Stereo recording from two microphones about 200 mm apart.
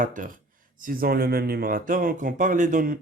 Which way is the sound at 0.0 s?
40° right (ahead or behind).